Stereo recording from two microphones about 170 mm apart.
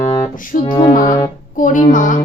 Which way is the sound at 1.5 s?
50° left (ahead or behind).